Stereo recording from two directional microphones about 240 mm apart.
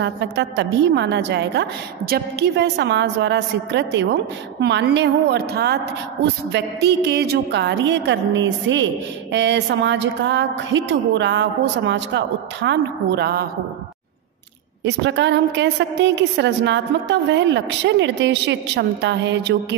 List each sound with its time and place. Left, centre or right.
0.0 s a woman's voice: right
14.9 s a woman's voice: right